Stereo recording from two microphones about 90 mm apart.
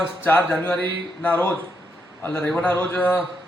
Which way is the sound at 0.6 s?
20° left (ahead or behind).